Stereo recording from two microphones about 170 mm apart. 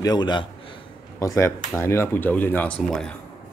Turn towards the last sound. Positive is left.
turn(degrees=5)  # may be behind; listen again after turning